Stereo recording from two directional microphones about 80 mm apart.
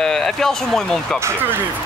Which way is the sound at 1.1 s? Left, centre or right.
Right.